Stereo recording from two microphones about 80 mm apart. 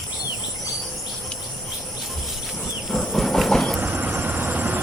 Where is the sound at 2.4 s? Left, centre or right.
Centre.